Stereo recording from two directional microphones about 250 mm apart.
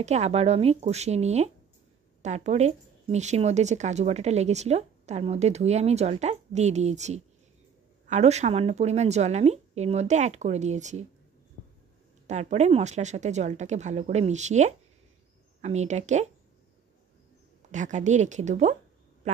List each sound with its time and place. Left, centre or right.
0.0 s speech: right
12.3 s speech: right
17.6 s speech: right